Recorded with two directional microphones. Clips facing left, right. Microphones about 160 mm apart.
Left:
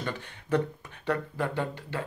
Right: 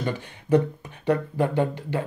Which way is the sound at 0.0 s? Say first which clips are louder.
Right 6 dB; 15° right (ahead or behind).